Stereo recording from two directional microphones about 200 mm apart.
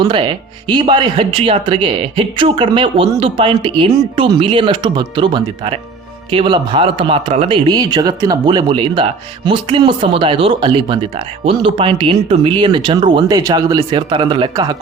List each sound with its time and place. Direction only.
0.0 s speech: 25° right (ahead or behind)